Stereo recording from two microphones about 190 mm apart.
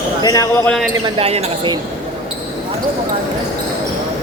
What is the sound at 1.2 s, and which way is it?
Speech, 35° right (ahead or behind).